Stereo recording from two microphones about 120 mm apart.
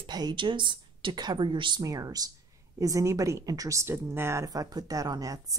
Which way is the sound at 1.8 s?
30° right (ahead or behind).